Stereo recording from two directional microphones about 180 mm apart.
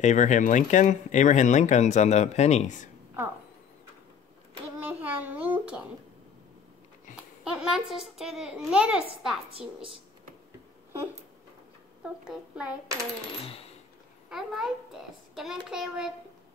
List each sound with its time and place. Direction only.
0.0 s speech: 40° left (ahead or behind)
4.7 s a child's voice: 10° right (ahead or behind)
7.5 s a child's voice: 5° right (ahead or behind)
9.5 s a woman's voice: 30° right (ahead or behind)
12.0 s a child's voice: 5° right (ahead or behind)
14.3 s a child's voice: centre (ahead or behind)